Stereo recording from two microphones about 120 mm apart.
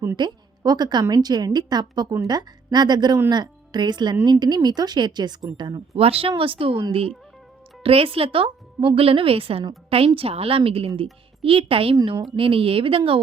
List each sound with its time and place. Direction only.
0.2 s a woman's voice: 35° right (ahead or behind)
6.0 s a woman's voice: 55° right (ahead or behind)
7.9 s a woman's voice: 50° right (ahead or behind)